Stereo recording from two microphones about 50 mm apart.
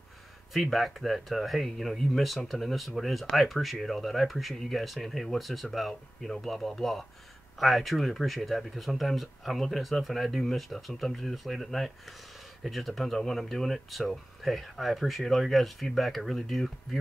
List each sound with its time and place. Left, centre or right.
0.5 s speech: centre